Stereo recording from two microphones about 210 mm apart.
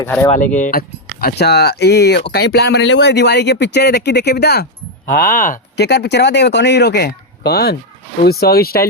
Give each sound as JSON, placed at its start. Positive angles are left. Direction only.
{"t": 0.0, "sound": "speech", "side_deg": 10}
{"t": 0.3, "sound": "speech", "side_deg": 35}